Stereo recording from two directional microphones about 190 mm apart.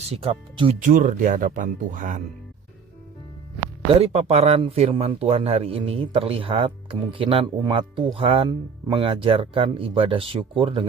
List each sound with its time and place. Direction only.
0.1 s speech: 30° right (ahead or behind)
0.8 s speech: 45° right (ahead or behind)
4.0 s speech: 35° right (ahead or behind)